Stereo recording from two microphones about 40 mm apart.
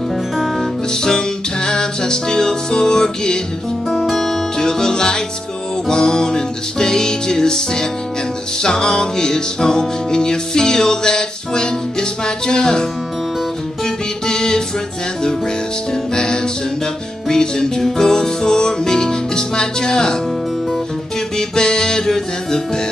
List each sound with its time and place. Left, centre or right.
1.0 s music: centre
3.9 s music: centre
13.8 s music: centre
15.9 s music: centre
21.4 s music: centre